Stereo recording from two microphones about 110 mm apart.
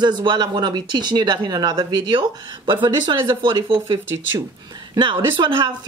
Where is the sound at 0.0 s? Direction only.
40° right (ahead or behind).